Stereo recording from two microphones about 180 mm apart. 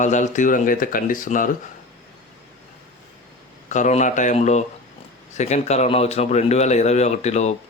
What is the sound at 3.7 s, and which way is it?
A man's voice, 40° left (ahead or behind).